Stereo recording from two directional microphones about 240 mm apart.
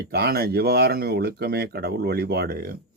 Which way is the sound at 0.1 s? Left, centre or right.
Right.